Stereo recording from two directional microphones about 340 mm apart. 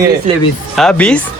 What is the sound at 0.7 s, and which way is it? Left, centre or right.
Speech, centre.